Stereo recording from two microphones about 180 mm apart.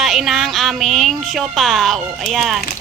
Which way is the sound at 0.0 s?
Centre (ahead or behind).